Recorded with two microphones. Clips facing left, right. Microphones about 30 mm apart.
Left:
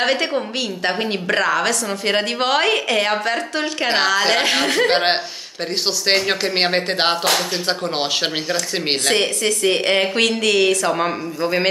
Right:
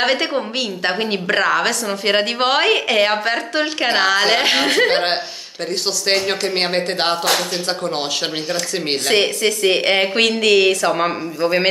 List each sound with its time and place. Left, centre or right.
0.0 s a woman's voice: centre
4.8 s speech: centre
8.5 s speech: centre
9.1 s a woman's voice: centre